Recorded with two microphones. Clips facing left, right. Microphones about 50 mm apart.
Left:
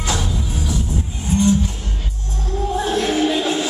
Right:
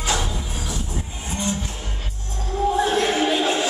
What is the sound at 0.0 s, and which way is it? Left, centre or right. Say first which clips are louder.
Train: left 1 dB; centre.